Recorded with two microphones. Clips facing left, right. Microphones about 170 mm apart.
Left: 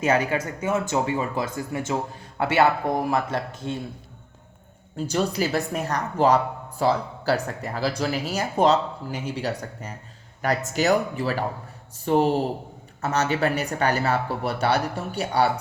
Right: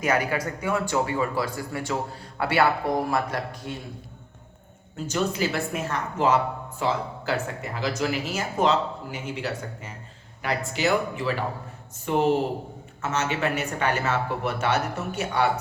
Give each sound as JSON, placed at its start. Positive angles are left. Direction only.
{"t": 0.0, "sound": "speech", "side_deg": 25}
{"t": 4.9, "sound": "speech", "side_deg": 35}